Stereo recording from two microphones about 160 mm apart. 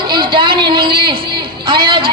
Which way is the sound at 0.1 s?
30° right (ahead or behind).